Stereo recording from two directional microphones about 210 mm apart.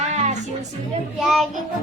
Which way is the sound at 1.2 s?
Centre (ahead or behind).